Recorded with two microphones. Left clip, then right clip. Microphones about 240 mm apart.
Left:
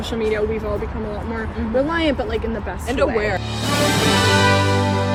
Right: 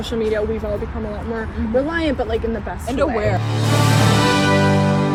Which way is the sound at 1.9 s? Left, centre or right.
Centre.